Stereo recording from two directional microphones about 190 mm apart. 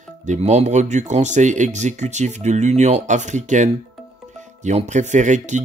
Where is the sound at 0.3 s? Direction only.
35° right (ahead or behind).